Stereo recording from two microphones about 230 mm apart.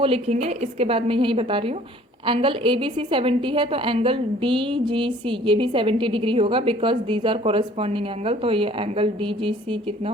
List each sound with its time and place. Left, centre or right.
0.0 s a woman's voice: right